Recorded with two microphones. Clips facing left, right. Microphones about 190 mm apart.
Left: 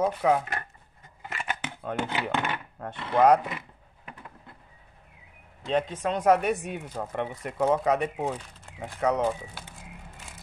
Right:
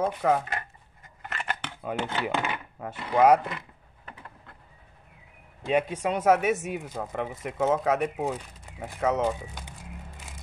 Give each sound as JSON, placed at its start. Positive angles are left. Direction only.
{"t": 0.0, "sound": "speech", "side_deg": 0}
{"t": 1.3, "sound": "a sound", "side_deg": 5}
{"t": 1.8, "sound": "speech", "side_deg": -5}
{"t": 3.4, "sound": "a sound", "side_deg": 5}
{"t": 5.7, "sound": "speech", "side_deg": -10}
{"t": 9.4, "sound": "speech", "side_deg": -15}